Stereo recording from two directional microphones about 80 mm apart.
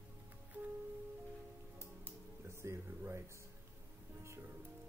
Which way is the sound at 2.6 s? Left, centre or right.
Right.